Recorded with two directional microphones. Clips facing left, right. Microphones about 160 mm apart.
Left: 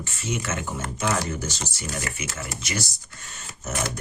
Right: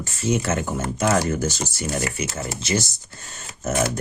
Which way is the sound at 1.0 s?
50° right (ahead or behind).